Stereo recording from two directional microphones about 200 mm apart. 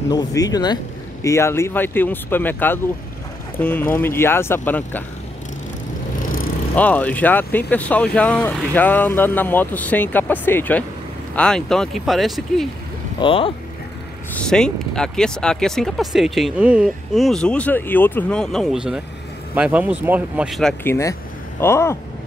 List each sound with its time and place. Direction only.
0.1 s speech: 20° left (ahead or behind)
6.7 s speech: 5° left (ahead or behind)
13.2 s speech: 25° left (ahead or behind)
14.3 s speech: 5° left (ahead or behind)
20.8 s speech: 15° left (ahead or behind)